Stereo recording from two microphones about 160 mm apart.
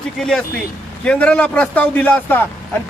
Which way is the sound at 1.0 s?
5° left (ahead or behind).